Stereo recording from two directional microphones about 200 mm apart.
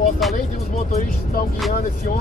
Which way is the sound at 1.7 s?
40° left (ahead or behind).